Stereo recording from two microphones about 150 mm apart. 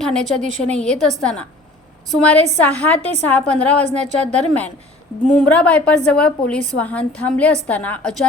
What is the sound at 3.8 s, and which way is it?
Speech, 50° right (ahead or behind).